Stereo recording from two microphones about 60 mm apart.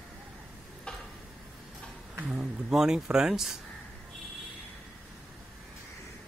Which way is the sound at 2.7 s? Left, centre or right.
Centre.